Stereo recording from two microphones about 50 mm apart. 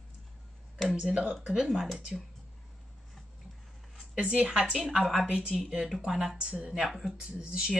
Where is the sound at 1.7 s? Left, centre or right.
Centre.